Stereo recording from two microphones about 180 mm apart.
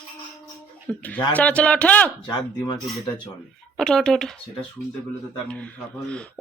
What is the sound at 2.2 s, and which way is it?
Speech, 25° left (ahead or behind).